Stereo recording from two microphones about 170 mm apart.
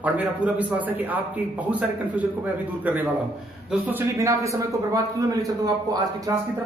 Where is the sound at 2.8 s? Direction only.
10° right (ahead or behind).